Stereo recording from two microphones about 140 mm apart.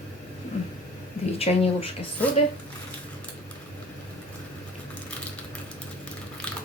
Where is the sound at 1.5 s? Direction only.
50° left (ahead or behind).